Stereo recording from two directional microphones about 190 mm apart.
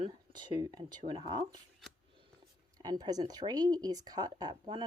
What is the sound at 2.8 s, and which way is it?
Speech, 20° right (ahead or behind).